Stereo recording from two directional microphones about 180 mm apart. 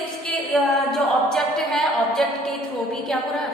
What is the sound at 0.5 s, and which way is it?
A woman's voice, centre (ahead or behind).